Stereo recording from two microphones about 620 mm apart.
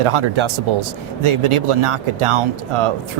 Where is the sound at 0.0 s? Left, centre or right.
Right.